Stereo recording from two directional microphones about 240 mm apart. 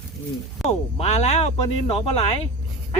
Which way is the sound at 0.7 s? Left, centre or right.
Left.